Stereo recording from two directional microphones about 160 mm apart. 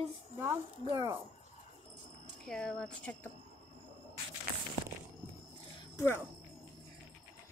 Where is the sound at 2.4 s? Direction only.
5° left (ahead or behind).